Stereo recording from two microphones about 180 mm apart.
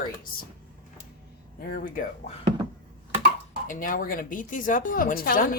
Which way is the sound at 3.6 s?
50° left (ahead or behind).